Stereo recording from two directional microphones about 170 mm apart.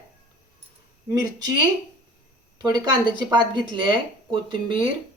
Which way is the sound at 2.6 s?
25° right (ahead or behind).